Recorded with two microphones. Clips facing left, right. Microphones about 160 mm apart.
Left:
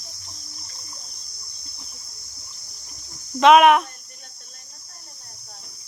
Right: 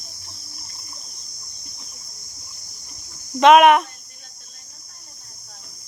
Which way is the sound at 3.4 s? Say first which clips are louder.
Right 1 dB; centre (ahead or behind).